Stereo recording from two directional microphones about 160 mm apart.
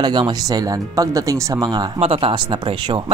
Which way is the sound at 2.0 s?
35° right (ahead or behind).